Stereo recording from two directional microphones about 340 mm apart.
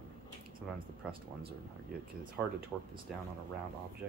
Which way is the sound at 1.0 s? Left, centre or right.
Centre.